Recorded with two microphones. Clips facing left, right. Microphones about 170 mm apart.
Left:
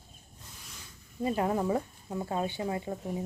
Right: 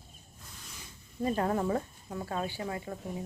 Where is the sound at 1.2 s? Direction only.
10° left (ahead or behind).